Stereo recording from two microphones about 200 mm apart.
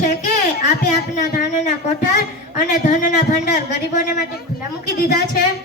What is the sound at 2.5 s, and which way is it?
Speech, 40° left (ahead or behind).